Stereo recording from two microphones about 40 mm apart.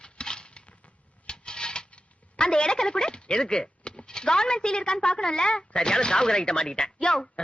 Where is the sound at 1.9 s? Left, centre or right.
Left.